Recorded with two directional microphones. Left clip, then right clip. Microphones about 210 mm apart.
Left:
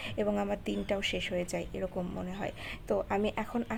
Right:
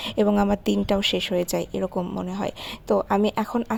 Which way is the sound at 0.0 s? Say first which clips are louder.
Right 10 dB; 35° right (ahead or behind).